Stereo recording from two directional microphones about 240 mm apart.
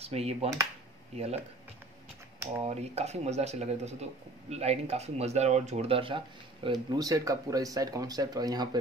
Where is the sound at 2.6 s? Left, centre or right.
Right.